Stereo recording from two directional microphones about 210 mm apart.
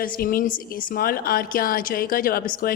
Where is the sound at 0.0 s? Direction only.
40° left (ahead or behind).